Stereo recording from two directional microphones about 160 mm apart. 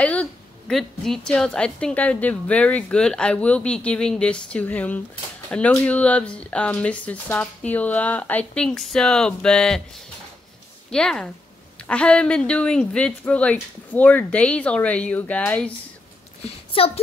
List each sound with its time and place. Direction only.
0.0 s a woman's voice: 5° left (ahead or behind)
10.9 s a woman's voice: 5° left (ahead or behind)
16.4 s a child's voice: 40° left (ahead or behind)